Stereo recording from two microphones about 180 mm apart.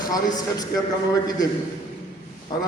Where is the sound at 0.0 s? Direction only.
20° left (ahead or behind).